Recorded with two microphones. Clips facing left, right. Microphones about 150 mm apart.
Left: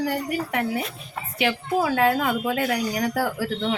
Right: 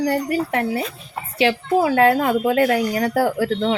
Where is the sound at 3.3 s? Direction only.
55° right (ahead or behind).